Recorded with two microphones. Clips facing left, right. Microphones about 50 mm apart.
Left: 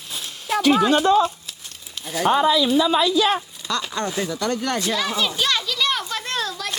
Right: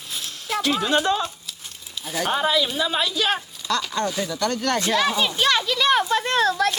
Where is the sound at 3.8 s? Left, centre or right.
Centre.